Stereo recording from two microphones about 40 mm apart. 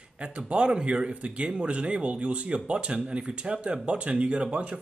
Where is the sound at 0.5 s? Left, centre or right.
Right.